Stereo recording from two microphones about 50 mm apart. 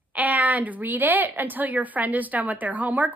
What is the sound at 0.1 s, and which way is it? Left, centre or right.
A woman's voice, right.